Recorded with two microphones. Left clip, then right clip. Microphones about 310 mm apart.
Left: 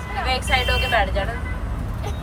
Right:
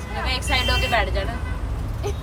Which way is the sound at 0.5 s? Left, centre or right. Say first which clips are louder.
Left 1 dB; centre.